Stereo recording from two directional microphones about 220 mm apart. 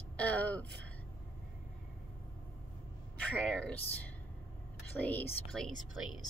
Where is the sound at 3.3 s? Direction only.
5° left (ahead or behind).